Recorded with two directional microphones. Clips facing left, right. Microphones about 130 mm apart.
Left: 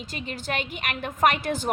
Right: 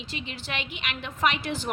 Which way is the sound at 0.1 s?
45° left (ahead or behind).